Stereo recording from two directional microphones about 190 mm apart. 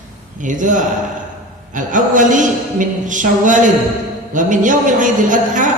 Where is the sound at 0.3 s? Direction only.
40° right (ahead or behind).